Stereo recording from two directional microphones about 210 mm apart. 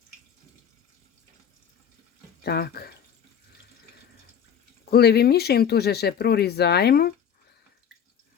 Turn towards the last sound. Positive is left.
turn(degrees=50)  # may be behind; listen again after turning